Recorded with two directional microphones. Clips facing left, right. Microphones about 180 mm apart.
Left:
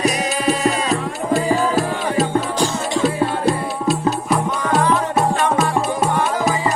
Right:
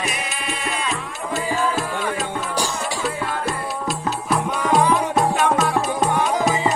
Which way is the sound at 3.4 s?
25° left (ahead or behind).